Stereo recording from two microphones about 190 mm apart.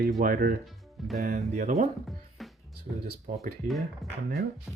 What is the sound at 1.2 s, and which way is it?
Speech, 40° right (ahead or behind).